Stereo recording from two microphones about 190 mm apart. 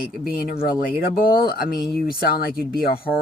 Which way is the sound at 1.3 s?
55° left (ahead or behind).